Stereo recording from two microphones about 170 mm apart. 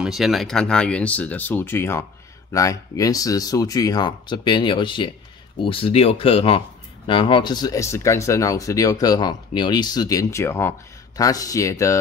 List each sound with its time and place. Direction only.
0.0 s speech: centre (ahead or behind); by 12.0 s 20° left (ahead or behind)